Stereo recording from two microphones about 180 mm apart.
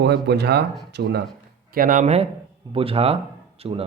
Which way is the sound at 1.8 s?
50° right (ahead or behind).